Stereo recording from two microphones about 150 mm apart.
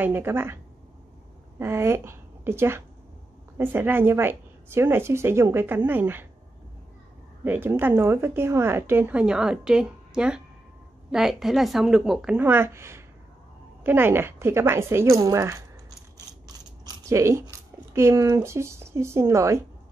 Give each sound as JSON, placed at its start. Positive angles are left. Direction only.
{"t": 0.0, "sound": "a woman's voice", "side_deg": -15}
{"t": 1.6, "sound": "a woman's voice", "side_deg": -15}
{"t": 7.4, "sound": "a woman's voice", "side_deg": -15}
{"t": 16.8, "sound": "a sound", "side_deg": -20}
{"t": 17.9, "sound": "a woman's voice", "side_deg": -20}